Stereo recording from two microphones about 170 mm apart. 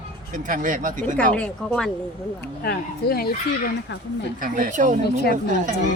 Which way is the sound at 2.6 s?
65° left (ahead or behind).